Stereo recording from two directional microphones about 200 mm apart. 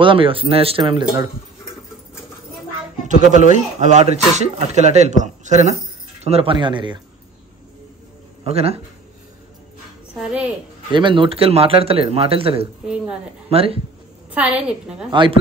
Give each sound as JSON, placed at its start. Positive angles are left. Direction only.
{"t": 0.0, "sound": "a man's voice", "side_deg": -25}
{"t": 3.0, "sound": "a man's voice", "side_deg": -40}
{"t": 8.5, "sound": "speech", "side_deg": -30}
{"t": 10.1, "sound": "a woman's voice", "side_deg": -5}
{"t": 10.9, "sound": "a man's voice", "side_deg": -25}
{"t": 12.8, "sound": "a woman's voice", "side_deg": -5}
{"t": 13.5, "sound": "speech", "side_deg": -30}
{"t": 14.3, "sound": "a woman's voice", "side_deg": -5}
{"t": 15.0, "sound": "a man's voice", "side_deg": -25}